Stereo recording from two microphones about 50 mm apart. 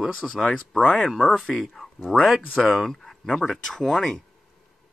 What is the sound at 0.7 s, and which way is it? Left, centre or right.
Speech, left.